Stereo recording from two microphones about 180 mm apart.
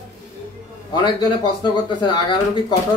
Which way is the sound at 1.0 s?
25° left (ahead or behind).